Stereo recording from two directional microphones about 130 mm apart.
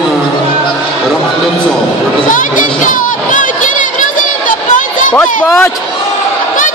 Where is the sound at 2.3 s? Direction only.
85° left.